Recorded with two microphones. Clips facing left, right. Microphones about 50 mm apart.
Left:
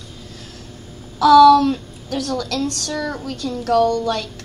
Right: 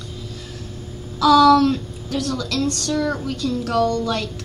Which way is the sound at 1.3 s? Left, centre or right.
Right.